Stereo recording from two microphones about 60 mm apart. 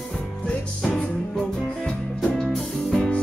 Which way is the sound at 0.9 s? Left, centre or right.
Centre.